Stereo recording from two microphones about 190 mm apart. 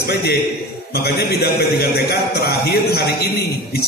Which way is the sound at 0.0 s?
55° left (ahead or behind).